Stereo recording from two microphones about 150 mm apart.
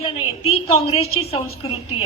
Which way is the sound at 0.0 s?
40° left (ahead or behind).